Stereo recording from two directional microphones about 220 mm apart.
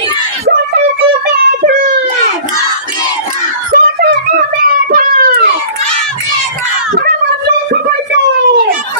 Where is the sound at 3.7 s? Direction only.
40° right (ahead or behind).